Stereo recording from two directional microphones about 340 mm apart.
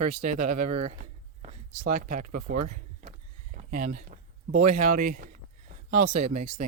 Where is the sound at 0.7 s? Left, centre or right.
Centre.